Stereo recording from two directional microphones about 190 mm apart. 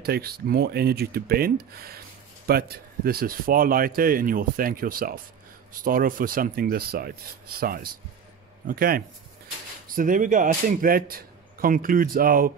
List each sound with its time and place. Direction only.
0.0 s speech: 55° right (ahead or behind)